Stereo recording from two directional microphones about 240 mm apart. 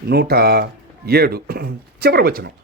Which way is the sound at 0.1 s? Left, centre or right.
Right.